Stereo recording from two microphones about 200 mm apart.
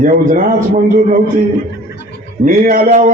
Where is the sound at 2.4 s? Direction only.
45° right (ahead or behind).